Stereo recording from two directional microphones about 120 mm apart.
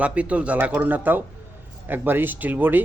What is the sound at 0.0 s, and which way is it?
Speech, 10° right (ahead or behind).